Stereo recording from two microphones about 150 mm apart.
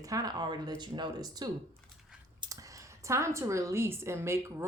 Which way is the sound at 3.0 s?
20° right (ahead or behind).